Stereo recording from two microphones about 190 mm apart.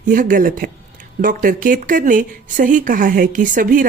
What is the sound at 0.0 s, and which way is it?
Speech, 45° right (ahead or behind).